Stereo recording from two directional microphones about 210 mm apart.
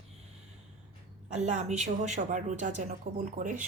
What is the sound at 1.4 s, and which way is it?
A woman's voice, 35° right (ahead or behind).